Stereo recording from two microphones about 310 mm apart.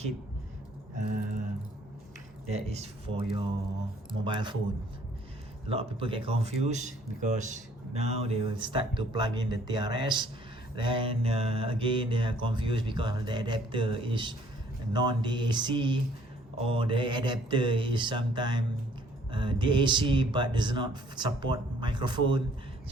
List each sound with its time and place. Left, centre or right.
2.5 s speech: right
5.6 s speech: centre